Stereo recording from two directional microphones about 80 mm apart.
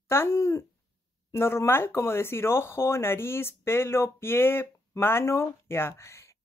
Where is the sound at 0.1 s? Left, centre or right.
Left.